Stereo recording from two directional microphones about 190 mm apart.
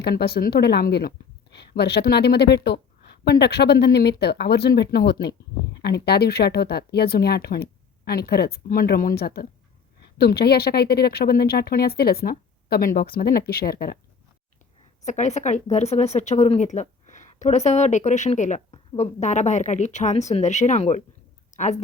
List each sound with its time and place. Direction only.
0.0 s a woman's voice: 60° left (ahead or behind)
15.0 s a woman's voice: 40° left (ahead or behind)